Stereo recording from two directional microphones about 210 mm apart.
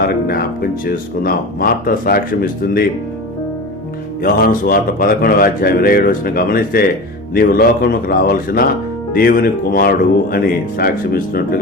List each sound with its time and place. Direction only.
0.0 s speech: 45° left (ahead or behind)
4.2 s speech: 45° left (ahead or behind)